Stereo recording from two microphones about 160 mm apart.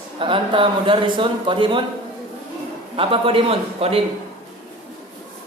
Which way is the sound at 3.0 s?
35° right (ahead or behind).